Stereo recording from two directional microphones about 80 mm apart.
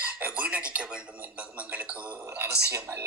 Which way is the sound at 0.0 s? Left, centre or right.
Centre.